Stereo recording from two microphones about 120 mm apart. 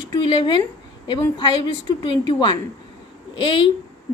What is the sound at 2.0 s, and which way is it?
A woman's voice, 40° left (ahead or behind).